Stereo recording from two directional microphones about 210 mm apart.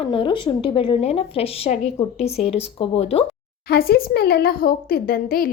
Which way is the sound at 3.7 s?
45° left (ahead or behind).